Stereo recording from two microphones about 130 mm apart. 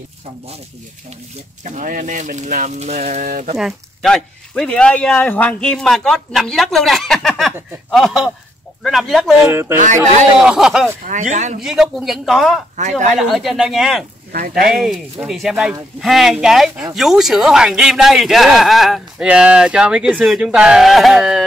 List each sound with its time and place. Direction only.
1.6 s speech: 85° right
3.5 s a man's voice: centre (ahead or behind)
9.5 s speech: 20° right (ahead or behind)
10.4 s a man's voice: 5° right (ahead or behind)
11.1 s speech: 75° right (ahead or behind)
11.6 s a man's voice: 5° right (ahead or behind)
12.8 s speech: 65° right (ahead or behind)
13.2 s a man's voice: centre (ahead or behind)